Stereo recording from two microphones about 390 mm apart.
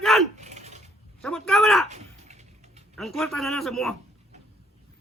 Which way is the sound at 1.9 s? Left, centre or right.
Centre.